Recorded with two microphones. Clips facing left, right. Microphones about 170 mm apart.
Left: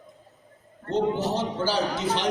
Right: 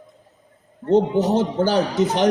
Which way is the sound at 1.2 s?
50° right (ahead or behind).